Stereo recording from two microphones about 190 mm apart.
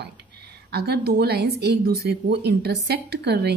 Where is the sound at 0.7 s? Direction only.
60° right (ahead or behind).